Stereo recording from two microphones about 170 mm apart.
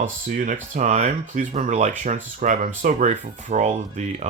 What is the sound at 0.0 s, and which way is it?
Speech, 50° right (ahead or behind).